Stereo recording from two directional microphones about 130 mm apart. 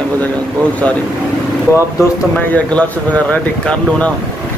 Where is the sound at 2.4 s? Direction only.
10° left (ahead or behind).